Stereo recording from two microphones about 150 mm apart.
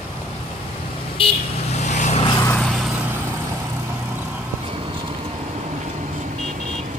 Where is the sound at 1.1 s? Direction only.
40° left (ahead or behind).